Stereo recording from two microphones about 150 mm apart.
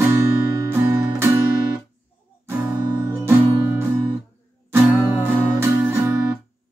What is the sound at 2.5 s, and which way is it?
Music, 15° right (ahead or behind).